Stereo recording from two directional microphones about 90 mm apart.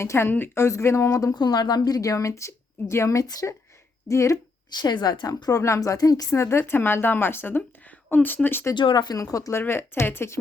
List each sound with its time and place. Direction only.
0.0 s a woman's voice: 30° left (ahead or behind)
4.7 s a woman's voice: 50° left (ahead or behind); by 8.7 s 25° left (ahead or behind)
8.7 s speech: 60° left (ahead or behind); by 9.5 s 40° left (ahead or behind)
9.5 s speech: 25° left (ahead or behind)